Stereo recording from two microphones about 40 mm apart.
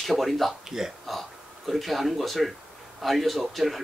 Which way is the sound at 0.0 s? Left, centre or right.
Centre.